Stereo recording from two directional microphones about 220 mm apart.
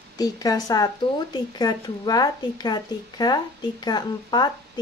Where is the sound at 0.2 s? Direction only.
15° left (ahead or behind).